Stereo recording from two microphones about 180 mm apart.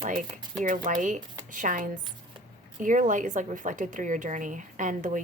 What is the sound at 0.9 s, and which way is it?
Speech, 45° right (ahead or behind).